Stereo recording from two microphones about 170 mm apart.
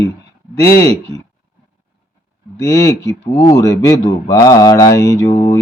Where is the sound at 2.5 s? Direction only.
20° left (ahead or behind).